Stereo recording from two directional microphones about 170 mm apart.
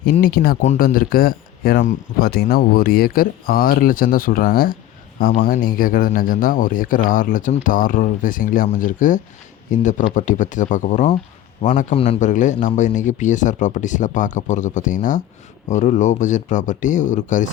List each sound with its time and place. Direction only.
0.0 s speech: 60° left (ahead or behind)
0.6 s speech: 45° left (ahead or behind)